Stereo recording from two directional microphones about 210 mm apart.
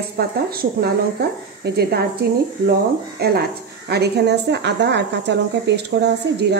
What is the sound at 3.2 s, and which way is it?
Speech, 50° right (ahead or behind).